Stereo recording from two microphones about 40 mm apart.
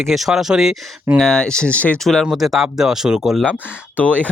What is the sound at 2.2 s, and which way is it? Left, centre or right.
Speech, centre.